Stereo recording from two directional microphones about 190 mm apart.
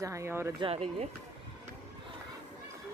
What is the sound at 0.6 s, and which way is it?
Speech, 30° right (ahead or behind).